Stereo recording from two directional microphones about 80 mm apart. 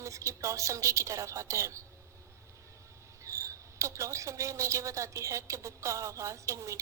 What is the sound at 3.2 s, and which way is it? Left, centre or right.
Cricket, right.